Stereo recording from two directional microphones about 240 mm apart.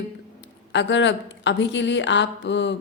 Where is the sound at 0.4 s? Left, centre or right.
Left.